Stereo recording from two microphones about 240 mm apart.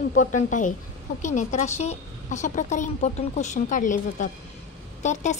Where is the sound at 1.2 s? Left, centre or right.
Left.